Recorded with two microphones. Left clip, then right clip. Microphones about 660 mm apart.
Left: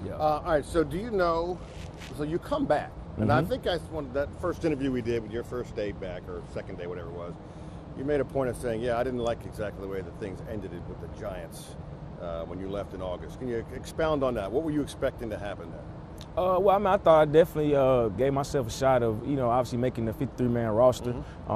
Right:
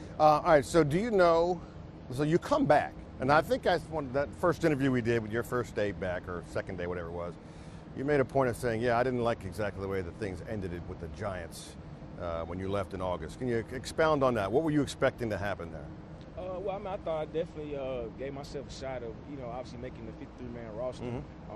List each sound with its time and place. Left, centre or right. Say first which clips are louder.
0.2 s speech: right 3 dB; right
16.3 s speech: left 14 dB; left